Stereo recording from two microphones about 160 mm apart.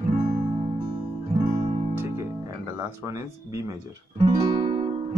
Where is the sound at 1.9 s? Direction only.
20° right (ahead or behind).